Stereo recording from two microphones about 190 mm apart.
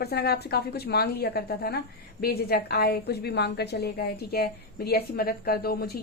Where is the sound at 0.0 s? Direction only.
55° left (ahead or behind).